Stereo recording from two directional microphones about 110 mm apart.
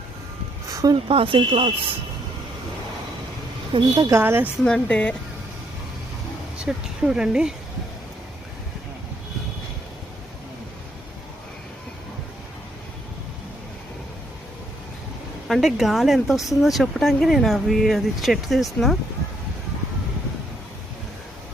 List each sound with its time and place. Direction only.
0.7 s a sound: 35° right (ahead or behind)
1.0 s speech: 55° right (ahead or behind)
3.7 s a woman's voice: 45° right (ahead or behind)
4.1 s a woman's voice: 20° right (ahead or behind)
4.6 s speech: 10° left (ahead or behind)
6.6 s speech: 5° right (ahead or behind)
15.4 s speech: centre (ahead or behind)